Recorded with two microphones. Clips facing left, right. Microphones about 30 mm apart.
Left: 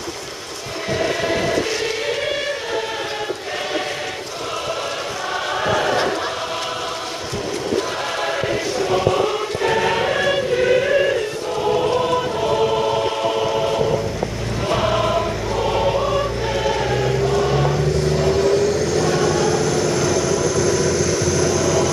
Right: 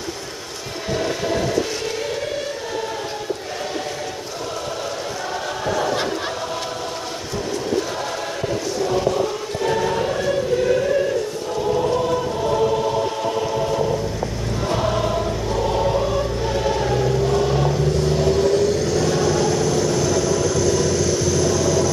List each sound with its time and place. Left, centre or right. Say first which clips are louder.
1.7 s choir: left 3 dB; left
5.3 s choir: left 5 dB; left
8.0 s choir: left 4 dB; left
9.1 s choir: left 3 dB; left
19.0 s vehicle: left 1 dB; centre